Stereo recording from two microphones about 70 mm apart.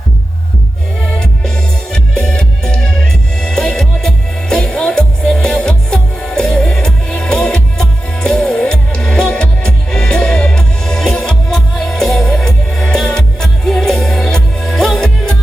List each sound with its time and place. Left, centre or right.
1.0 s music: centre